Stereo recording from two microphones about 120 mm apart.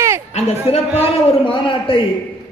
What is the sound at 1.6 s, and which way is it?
Speech, 45° left (ahead or behind).